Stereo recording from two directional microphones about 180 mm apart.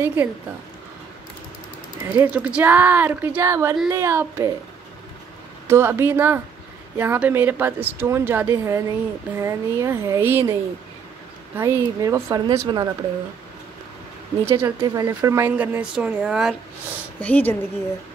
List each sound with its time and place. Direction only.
0.0 s speech: 10° right (ahead or behind)
2.1 s speech: 10° right (ahead or behind)
5.7 s speech: 15° right (ahead or behind)
14.4 s speech: 15° right (ahead or behind)
17.2 s speech: 10° left (ahead or behind)